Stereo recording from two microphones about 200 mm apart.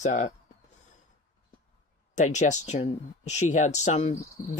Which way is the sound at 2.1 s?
35° left (ahead or behind).